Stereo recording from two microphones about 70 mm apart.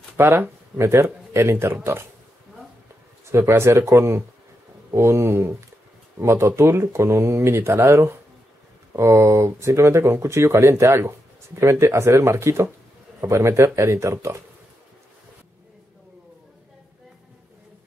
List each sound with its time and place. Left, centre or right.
0.2 s speech: right
3.3 s speech: right